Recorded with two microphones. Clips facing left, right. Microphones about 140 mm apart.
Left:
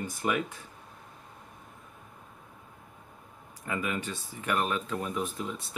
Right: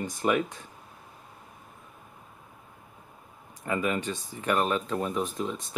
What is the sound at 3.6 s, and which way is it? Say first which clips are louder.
Speech: right 4 dB; 30° right (ahead or behind).